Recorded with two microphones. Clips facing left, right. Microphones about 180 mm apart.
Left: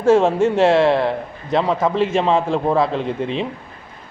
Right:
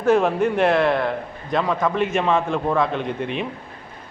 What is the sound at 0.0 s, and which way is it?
A man's voice, 25° left (ahead or behind).